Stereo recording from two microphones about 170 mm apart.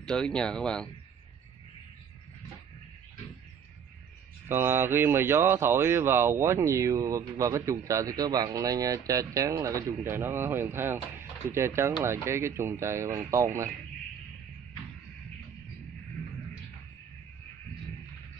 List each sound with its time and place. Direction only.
0.0 s speech: 5° left (ahead or behind)
4.5 s speech: 15° right (ahead or behind)